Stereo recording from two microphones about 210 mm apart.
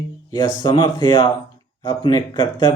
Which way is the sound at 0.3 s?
20° left (ahead or behind).